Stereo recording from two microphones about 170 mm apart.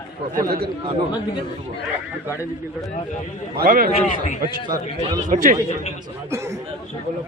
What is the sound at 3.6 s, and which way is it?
Speech, 60° right (ahead or behind).